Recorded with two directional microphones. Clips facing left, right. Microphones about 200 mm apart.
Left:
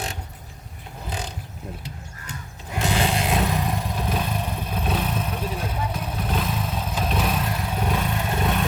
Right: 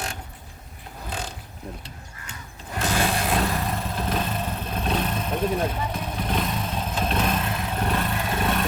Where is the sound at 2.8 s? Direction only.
15° left (ahead or behind).